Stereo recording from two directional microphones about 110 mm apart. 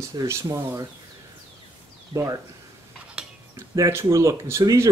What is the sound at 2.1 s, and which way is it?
Speech, 50° right (ahead or behind).